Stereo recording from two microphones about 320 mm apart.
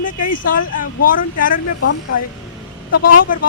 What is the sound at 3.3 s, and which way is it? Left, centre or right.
Speech, left.